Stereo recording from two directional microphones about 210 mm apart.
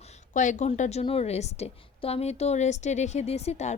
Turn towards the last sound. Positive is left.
turn(degrees=30)  # may be behind; listen again after turning